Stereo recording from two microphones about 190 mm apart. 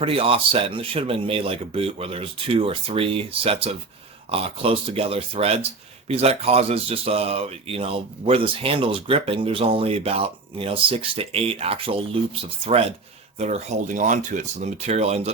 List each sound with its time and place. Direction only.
0.0 s speech: 30° right (ahead or behind)
13.4 s speech: 35° right (ahead or behind)